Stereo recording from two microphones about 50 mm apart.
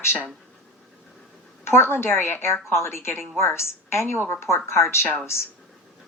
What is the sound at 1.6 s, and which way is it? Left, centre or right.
A woman's voice, left.